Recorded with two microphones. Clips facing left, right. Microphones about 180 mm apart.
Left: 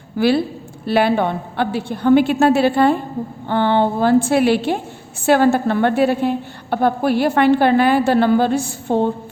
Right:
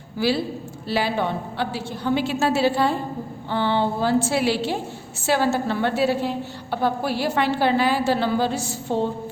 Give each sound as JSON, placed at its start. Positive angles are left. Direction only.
{"t": 0.2, "sound": "a woman's voice", "side_deg": 55}